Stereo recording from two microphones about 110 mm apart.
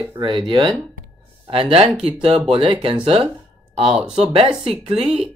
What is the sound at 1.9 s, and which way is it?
Speech, 5° right (ahead or behind).